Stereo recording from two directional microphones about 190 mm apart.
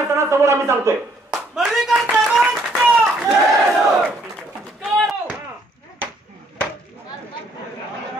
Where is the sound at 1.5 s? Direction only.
5° right (ahead or behind).